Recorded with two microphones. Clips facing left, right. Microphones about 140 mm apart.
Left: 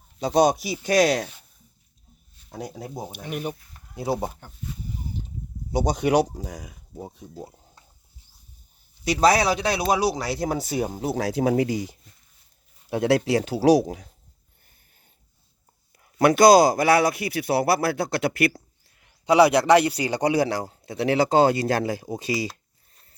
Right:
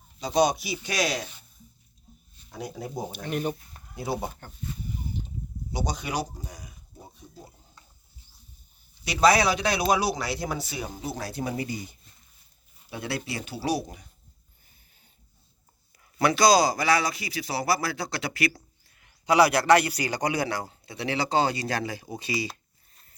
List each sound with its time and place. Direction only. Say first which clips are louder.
0.2 s a man's voice: left 4 dB; 55° left (ahead or behind)
2.5 s speech: left 1 dB; 40° left (ahead or behind)
3.1 s speech: right 2 dB; 10° left (ahead or behind)
3.9 s speech: left 4 dB; 35° left (ahead or behind)
4.4 s speech: even; 10° left (ahead or behind)
5.7 s speech: left 10 dB; 55° left (ahead or behind); by 7.1 s 90° left
9.0 s speech: left 2 dB; 35° left (ahead or behind)
11.1 s speech: left 11 dB; 90° left
16.1 s a man's voice: left 6 dB; 50° left (ahead or behind)
19.2 s a man's voice: left 4 dB; 30° left (ahead or behind)